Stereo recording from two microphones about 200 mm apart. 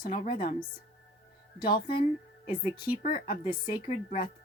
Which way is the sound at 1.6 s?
50° left (ahead or behind).